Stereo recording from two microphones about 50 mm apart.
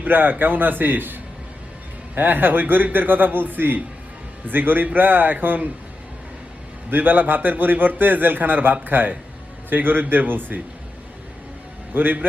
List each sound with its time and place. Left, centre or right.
0.0 s a man's voice: right
6.9 s a man's voice: right
11.9 s a man's voice: right